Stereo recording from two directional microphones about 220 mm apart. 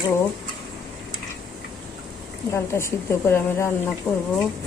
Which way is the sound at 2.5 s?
10° left (ahead or behind).